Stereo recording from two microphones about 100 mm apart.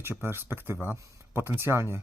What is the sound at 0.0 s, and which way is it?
Speech, 25° right (ahead or behind).